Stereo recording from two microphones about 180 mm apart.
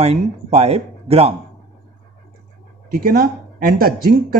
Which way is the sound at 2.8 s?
55° right (ahead or behind).